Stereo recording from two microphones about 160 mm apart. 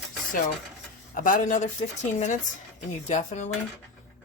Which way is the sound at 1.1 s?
60° left (ahead or behind).